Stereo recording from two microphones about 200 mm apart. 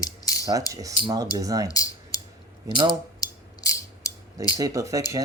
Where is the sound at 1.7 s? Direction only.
15° left (ahead or behind).